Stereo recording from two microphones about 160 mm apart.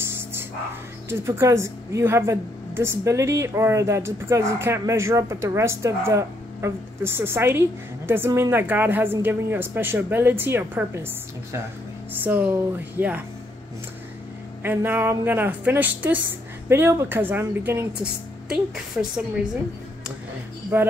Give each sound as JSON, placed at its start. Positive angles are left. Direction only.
{"t": 0.1, "sound": "a sound", "side_deg": -15}
{"t": 1.0, "sound": "a woman's voice", "side_deg": -15}
{"t": 12.1, "sound": "a woman's voice", "side_deg": -10}
{"t": 14.6, "sound": "a woman's voice", "side_deg": -15}
{"t": 20.7, "sound": "a woman's voice", "side_deg": -15}